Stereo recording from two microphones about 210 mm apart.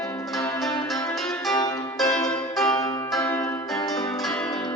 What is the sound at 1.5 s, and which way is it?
Music, 20° left (ahead or behind).